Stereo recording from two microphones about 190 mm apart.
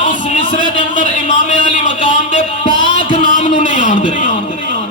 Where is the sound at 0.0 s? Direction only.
45° left (ahead or behind).